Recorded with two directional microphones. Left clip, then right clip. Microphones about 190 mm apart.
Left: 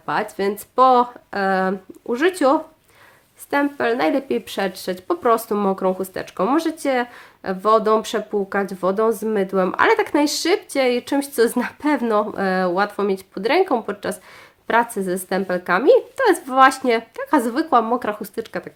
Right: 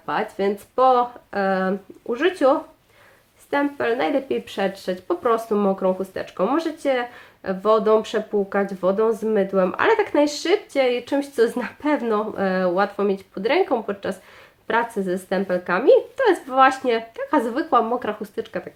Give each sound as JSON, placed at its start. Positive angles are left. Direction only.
{"t": 0.0, "sound": "speech", "side_deg": 40}